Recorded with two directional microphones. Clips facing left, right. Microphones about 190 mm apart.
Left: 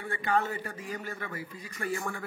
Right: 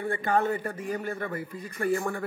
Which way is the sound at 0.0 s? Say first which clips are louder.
Right 4 dB; 50° right (ahead or behind).